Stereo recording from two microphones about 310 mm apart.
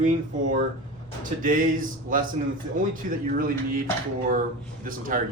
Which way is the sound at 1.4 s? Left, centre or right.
Right.